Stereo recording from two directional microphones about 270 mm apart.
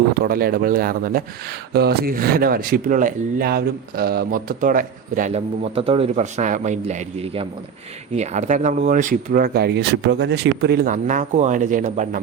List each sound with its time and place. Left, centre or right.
0.3 s speech: right